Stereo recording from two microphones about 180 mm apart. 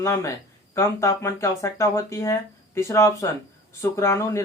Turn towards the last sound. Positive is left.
turn(degrees=15)  # may be behind; listen again after turning